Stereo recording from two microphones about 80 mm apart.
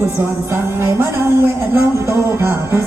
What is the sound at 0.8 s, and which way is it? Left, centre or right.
Speech, right.